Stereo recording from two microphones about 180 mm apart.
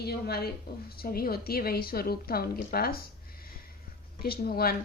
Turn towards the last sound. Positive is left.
turn(degrees=55)  # may be behind; listen again after turning